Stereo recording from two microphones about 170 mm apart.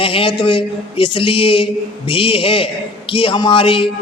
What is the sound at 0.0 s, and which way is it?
A man's voice, 30° left (ahead or behind).